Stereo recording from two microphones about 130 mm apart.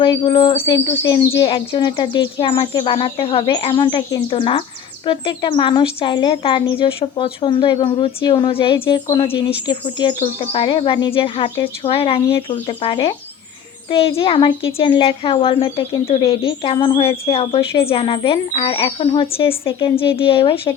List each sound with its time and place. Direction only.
0.0 s speech: 40° left (ahead or behind)